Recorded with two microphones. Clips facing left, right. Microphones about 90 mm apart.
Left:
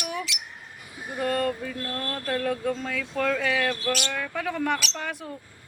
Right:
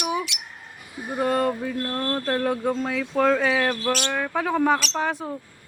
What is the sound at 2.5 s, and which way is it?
Speech, 10° right (ahead or behind).